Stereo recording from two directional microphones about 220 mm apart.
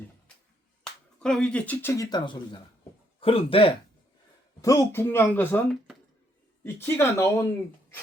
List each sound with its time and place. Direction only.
1.2 s speech: 5° left (ahead or behind); by 3.8 s 25° left (ahead or behind)
4.6 s speech: 10° left (ahead or behind)